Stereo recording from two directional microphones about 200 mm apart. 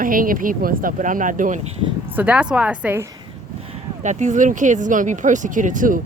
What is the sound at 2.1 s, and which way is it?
Speech, 5° right (ahead or behind).